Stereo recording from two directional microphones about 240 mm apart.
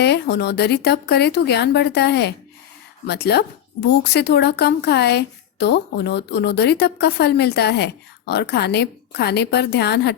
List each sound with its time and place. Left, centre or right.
0.0 s a woman's voice: left